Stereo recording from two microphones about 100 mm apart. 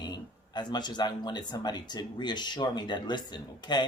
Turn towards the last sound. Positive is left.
turn(degrees=45)  # may be behind; listen again after turning